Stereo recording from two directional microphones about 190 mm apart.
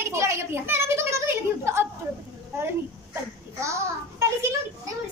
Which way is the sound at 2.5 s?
15° right (ahead or behind).